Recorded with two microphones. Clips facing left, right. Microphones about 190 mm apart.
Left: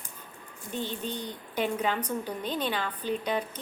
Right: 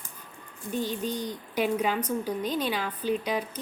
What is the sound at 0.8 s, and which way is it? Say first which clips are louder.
Speech: right 3 dB; 40° right (ahead or behind).